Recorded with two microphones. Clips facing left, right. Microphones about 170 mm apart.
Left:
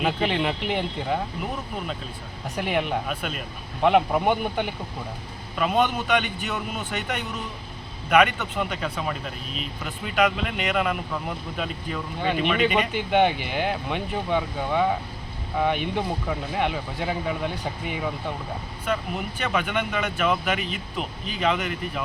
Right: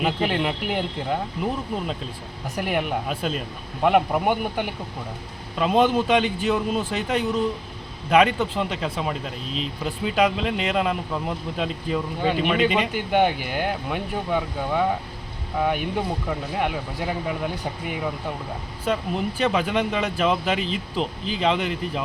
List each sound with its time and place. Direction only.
0.0 s speech: 5° right (ahead or behind)
2.6 s speech: centre (ahead or behind)
3.1 s speech: 30° right (ahead or behind)
3.8 s speech: 5° right (ahead or behind)
5.5 s speech: 30° right (ahead or behind)
12.9 s speech: 5° right (ahead or behind)
18.9 s speech: 30° right (ahead or behind)